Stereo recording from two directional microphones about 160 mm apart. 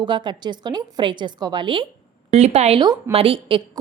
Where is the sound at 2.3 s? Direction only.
40° right (ahead or behind).